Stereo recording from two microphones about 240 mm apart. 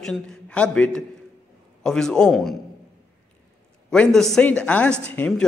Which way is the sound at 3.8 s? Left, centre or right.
Centre.